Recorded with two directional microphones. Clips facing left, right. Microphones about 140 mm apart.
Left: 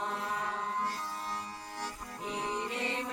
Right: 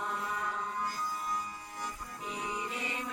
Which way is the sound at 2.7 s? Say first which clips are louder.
Left 3 dB; 30° left (ahead or behind).